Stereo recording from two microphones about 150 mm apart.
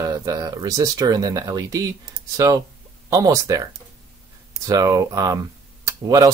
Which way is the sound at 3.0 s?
25° right (ahead or behind).